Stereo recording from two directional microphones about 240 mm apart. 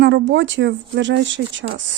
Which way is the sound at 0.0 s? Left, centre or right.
Right.